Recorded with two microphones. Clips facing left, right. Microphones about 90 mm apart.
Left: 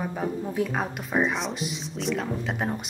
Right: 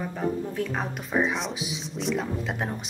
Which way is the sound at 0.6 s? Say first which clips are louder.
Left 2 dB; 5° left (ahead or behind).